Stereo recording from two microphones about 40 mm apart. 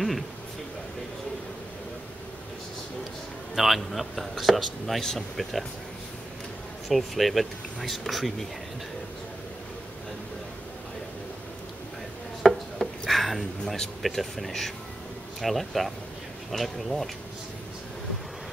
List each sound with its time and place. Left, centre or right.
3.5 s speech: centre
6.9 s speech: centre
12.4 s chopping: centre
14.0 s speech: centre